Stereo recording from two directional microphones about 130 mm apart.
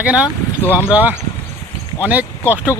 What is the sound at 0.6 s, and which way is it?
Speech, 15° left (ahead or behind).